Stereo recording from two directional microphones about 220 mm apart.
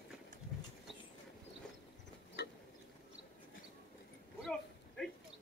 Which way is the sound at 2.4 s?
50° left (ahead or behind).